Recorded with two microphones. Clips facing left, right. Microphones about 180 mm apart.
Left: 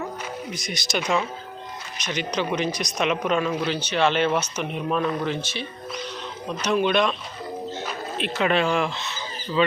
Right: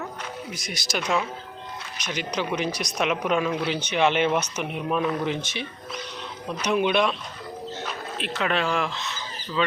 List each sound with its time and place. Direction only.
0.5 s speech: 5° right (ahead or behind)
2.0 s speech: 10° right (ahead or behind)
7.9 s music: 5° left (ahead or behind)
8.7 s speech: centre (ahead or behind)